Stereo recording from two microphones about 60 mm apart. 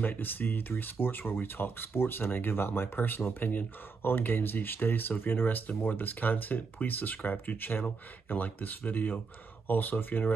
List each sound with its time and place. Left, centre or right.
0.0 s speech: left